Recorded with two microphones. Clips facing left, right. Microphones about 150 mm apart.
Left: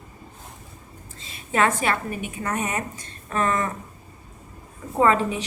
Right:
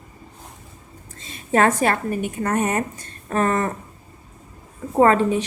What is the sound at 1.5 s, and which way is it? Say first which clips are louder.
A woman's voice: right 4 dB; 45° right (ahead or behind).